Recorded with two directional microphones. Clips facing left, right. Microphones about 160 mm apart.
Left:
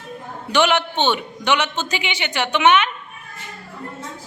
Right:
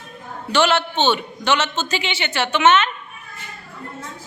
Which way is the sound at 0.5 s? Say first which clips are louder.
Even; 15° left (ahead or behind).